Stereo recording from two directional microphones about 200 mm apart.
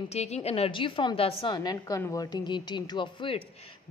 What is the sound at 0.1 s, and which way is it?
A woman's voice, 30° left (ahead or behind).